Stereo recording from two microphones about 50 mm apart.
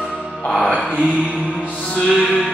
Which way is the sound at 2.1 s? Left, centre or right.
Centre.